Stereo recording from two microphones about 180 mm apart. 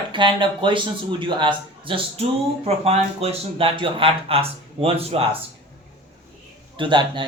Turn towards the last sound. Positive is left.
turn(degrees=-25)  # may be behind; listen again after turning